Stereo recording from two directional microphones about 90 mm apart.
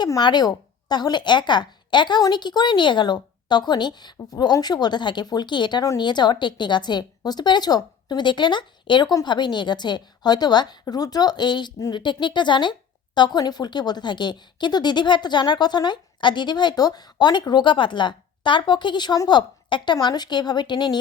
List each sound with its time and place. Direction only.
0.2 s a woman's voice: 55° left (ahead or behind)